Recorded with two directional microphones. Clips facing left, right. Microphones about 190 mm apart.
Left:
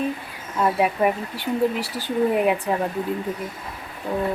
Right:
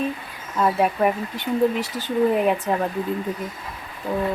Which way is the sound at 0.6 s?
5° left (ahead or behind).